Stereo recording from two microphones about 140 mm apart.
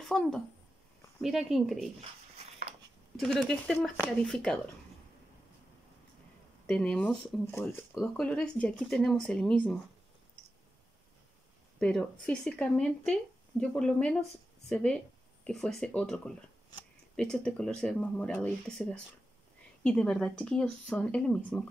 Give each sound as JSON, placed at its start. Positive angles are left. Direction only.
{"t": 0.0, "sound": "speech", "side_deg": 0}
{"t": 3.2, "sound": "speech", "side_deg": 0}
{"t": 6.7, "sound": "speech", "side_deg": 10}
{"t": 7.9, "sound": "speech", "side_deg": 5}
{"t": 11.8, "sound": "speech", "side_deg": 5}